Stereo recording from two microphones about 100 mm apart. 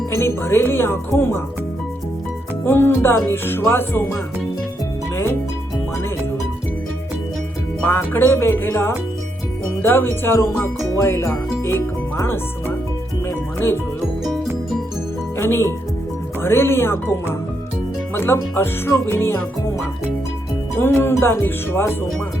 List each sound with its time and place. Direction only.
0.3 s speech: 25° left (ahead or behind)
2.6 s speech: 25° left (ahead or behind)
7.9 s speech: 20° left (ahead or behind)
13.2 s music: 25° left (ahead or behind)
15.4 s speech: 25° left (ahead or behind)
20.7 s speech: 25° left (ahead or behind)